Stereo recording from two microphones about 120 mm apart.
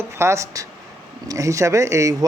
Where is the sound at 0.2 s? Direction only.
25° right (ahead or behind).